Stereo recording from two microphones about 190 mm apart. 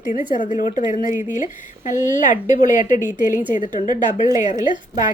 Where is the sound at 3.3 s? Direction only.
10° right (ahead or behind).